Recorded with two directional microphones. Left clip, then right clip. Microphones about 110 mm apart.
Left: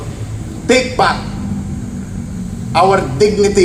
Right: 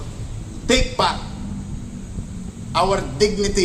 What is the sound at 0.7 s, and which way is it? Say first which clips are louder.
Speech: left 7 dB; 15° right (ahead or behind).